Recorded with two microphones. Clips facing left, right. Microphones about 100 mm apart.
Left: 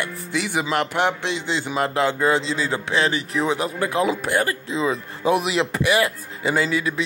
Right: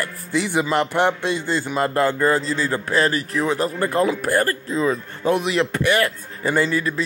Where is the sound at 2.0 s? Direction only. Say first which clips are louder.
Even; 15° left (ahead or behind).